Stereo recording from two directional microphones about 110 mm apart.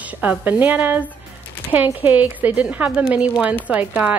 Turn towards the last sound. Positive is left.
turn(degrees=-15)  # may be behind; listen again after turning